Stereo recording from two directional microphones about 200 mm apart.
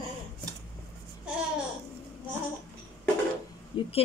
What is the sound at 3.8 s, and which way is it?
Speech, 30° left (ahead or behind).